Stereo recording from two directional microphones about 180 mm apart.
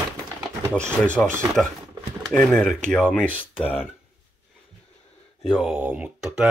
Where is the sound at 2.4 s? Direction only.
Centre (ahead or behind).